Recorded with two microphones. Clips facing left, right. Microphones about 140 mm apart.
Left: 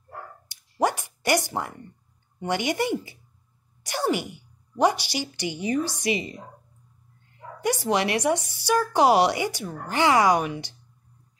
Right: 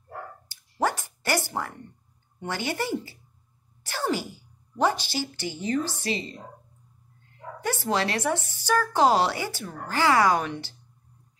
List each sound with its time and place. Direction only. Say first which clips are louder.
0.5 s a sound: left 3 dB; 15° left (ahead or behind)
2.4 s speech: left 4 dB; 15° left (ahead or behind)
7.6 s speech: left 3 dB; 15° left (ahead or behind)